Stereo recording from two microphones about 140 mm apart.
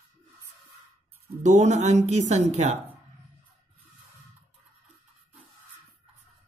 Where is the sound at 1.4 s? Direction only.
55° right (ahead or behind).